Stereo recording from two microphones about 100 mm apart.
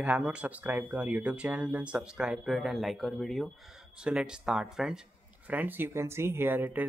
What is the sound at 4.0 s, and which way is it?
Speech, 10° right (ahead or behind).